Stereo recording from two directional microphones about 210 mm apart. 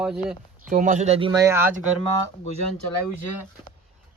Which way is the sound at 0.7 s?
35° right (ahead or behind).